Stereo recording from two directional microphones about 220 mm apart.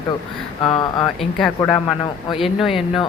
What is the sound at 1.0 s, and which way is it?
Speech, centre (ahead or behind).